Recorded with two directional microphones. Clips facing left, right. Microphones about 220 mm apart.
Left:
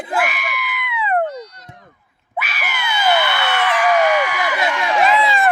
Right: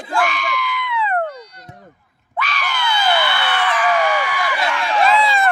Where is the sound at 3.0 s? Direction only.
20° left (ahead or behind).